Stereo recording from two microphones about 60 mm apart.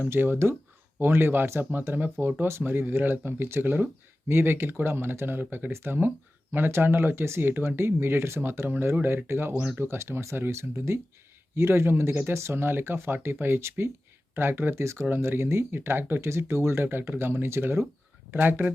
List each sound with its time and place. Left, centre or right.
0.1 s speech: right
12.3 s speech: right
14.3 s speech: right